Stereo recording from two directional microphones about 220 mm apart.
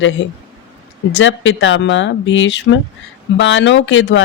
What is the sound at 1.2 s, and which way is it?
Speech, 55° left (ahead or behind).